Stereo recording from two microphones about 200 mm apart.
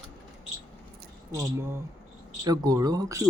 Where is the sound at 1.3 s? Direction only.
15° right (ahead or behind).